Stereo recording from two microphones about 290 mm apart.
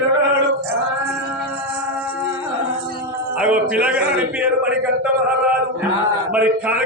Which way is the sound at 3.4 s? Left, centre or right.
Centre.